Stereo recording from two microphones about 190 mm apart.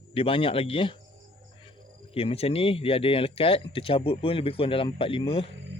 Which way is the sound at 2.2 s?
30° left (ahead or behind).